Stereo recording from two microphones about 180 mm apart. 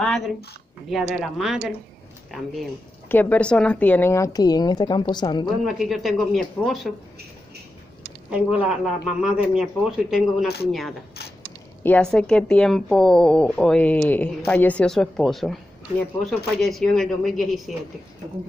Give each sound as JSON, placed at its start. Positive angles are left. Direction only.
{"t": 0.0, "sound": "a woman's voice", "side_deg": 0}
{"t": 5.7, "sound": "speech", "side_deg": 0}
{"t": 8.3, "sound": "speech", "side_deg": -5}